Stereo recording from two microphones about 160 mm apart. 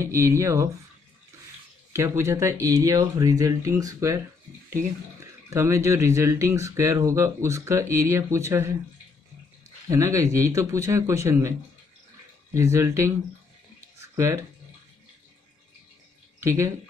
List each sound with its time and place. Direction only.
0.0 s speech: 15° right (ahead or behind)
1.9 s speech: 15° right (ahead or behind)
5.5 s speech: 15° right (ahead or behind)
9.8 s speech: 20° right (ahead or behind)
12.5 s speech: 20° right (ahead or behind)
14.1 s speech: 15° right (ahead or behind)
16.3 s speech: 20° right (ahead or behind)